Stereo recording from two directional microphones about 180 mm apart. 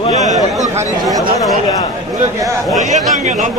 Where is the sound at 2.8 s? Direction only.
40° right (ahead or behind).